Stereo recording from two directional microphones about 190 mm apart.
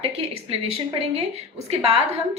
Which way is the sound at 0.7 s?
30° right (ahead or behind).